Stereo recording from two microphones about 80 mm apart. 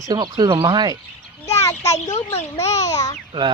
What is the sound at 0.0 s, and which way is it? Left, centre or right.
Speech, right.